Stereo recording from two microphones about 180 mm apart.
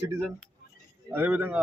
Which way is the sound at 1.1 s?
10° right (ahead or behind).